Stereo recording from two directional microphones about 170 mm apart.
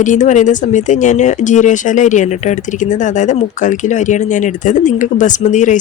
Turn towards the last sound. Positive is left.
turn(degrees=45)  # may be behind; listen again after turning